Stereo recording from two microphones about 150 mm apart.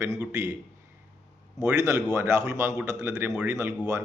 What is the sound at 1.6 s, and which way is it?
A man's voice, 20° right (ahead or behind).